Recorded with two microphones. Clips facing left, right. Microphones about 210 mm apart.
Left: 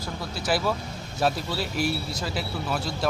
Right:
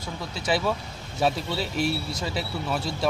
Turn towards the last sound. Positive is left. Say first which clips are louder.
# right 1 dB
turn(degrees=0)  # may be behind; listen again after turning